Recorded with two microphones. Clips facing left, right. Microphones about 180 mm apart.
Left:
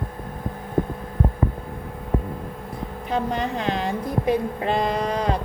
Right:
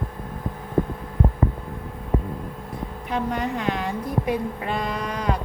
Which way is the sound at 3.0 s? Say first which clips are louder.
Left 1 dB; 30° left (ahead or behind).